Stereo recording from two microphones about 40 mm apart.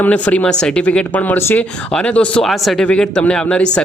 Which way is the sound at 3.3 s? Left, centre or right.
Left.